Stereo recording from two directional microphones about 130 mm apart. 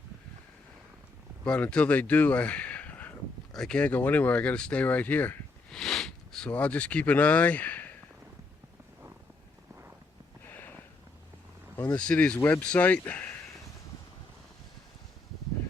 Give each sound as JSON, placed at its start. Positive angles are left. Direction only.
{"t": 1.5, "sound": "speech", "side_deg": 10}
{"t": 11.9, "sound": "speech", "side_deg": 10}